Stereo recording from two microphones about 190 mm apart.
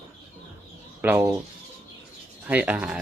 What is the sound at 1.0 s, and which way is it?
Speech, 10° right (ahead or behind).